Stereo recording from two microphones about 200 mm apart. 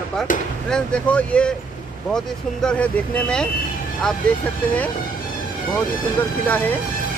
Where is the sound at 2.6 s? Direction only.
5° left (ahead or behind).